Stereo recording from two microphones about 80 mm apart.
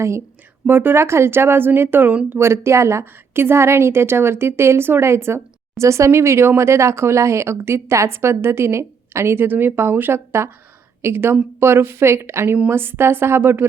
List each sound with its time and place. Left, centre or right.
0.7 s a woman's voice: right